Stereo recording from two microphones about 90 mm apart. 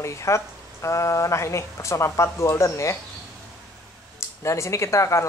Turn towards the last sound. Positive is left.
turn(degrees=35)  # may be behind; listen again after turning